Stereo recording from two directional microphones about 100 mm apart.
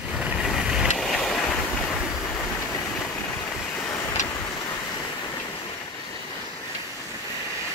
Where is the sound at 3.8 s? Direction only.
30° left (ahead or behind).